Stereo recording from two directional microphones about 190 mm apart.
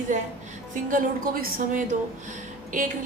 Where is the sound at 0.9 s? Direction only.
50° right (ahead or behind).